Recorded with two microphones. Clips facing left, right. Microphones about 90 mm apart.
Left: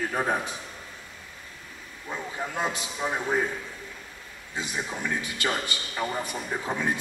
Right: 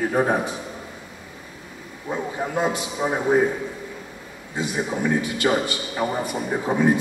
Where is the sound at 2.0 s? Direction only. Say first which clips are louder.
Right 7 dB; 25° right (ahead or behind).